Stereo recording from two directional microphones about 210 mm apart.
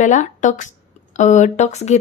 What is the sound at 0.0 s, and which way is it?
Speech, 35° left (ahead or behind).